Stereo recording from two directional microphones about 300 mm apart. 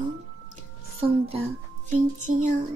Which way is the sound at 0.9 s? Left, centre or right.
Centre.